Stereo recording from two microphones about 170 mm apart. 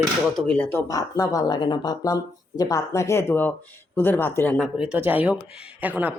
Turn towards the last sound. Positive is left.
turn(degrees=-10)  # may be behind; listen again after turning